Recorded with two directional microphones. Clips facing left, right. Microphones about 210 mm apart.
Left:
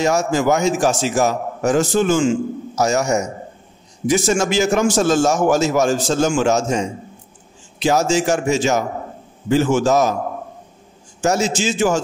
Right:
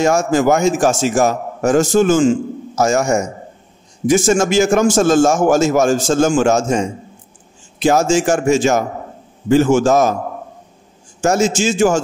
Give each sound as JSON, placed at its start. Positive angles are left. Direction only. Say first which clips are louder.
{"t": 0.0, "sound": "a man's voice", "louder": "right 3 dB", "side_deg": -50}
{"t": 11.1, "sound": "a man's voice", "louder": "right 3 dB", "side_deg": -50}